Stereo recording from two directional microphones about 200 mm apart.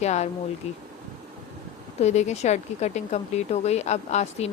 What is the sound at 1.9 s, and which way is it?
Speech, 35° left (ahead or behind).